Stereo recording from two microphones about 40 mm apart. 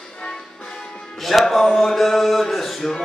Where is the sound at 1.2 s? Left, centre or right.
Centre.